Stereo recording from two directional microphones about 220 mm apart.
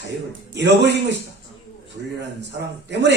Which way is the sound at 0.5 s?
50° right (ahead or behind).